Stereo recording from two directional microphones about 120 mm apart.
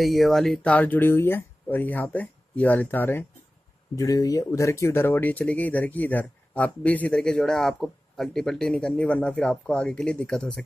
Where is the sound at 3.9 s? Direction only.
30° left (ahead or behind).